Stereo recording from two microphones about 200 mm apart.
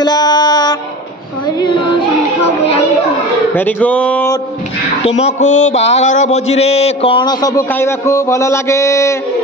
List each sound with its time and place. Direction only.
0.0 s music: 20° left (ahead or behind)
3.5 s speech: 10° left (ahead or behind)
5.0 s a sound: 35° left (ahead or behind); by 9.1 s 15° left (ahead or behind)